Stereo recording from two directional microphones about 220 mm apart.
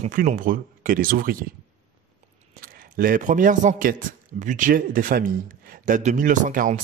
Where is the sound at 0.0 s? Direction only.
35° right (ahead or behind).